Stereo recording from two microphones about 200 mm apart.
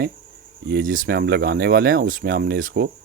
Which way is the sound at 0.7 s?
45° right (ahead or behind).